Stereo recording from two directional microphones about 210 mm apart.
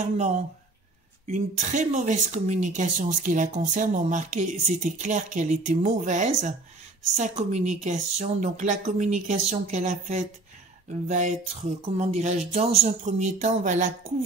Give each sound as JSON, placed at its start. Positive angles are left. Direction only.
{"t": 1.2, "sound": "speech", "side_deg": -35}